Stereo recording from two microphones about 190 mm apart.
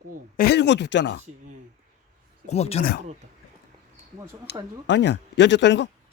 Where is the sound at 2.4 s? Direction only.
35° left (ahead or behind).